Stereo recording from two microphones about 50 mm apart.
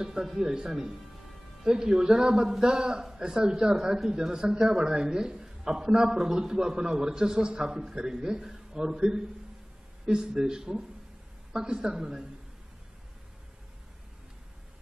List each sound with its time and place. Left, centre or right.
0.0 s speech: centre